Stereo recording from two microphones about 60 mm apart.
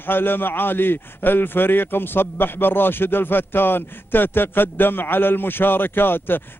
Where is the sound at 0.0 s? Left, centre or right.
Left.